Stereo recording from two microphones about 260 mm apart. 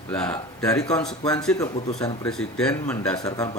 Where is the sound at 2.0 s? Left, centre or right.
Centre.